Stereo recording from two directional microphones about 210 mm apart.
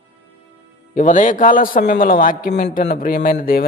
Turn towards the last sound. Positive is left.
turn(degrees=45)  # may be behind; listen again after turning